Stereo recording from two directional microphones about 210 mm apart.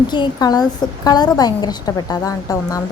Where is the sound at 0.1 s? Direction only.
20° left (ahead or behind).